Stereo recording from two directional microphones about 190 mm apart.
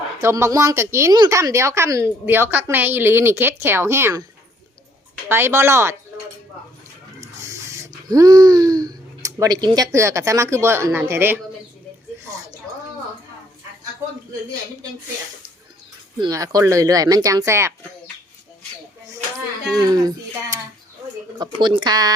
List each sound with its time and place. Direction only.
0.2 s speech: 15° right (ahead or behind)
5.3 s speech: 10° right (ahead or behind)
7.2 s speech: 15° right (ahead or behind)
16.1 s speech: 20° right (ahead or behind)
19.7 s speech: 20° right (ahead or behind)